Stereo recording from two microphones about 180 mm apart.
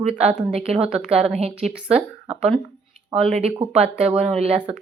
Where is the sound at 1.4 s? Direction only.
35° right (ahead or behind).